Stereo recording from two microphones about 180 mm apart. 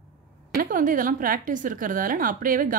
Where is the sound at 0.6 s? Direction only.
50° right (ahead or behind).